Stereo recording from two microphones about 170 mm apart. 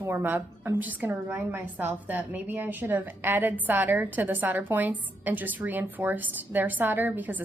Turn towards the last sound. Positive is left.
turn(degrees=-10)  # may be behind; listen again after turning